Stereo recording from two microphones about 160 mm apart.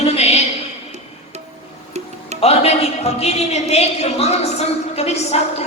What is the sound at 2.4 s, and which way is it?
A woman's voice, 40° left (ahead or behind).